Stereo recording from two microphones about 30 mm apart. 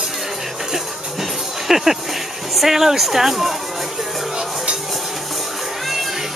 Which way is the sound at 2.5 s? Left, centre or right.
Centre.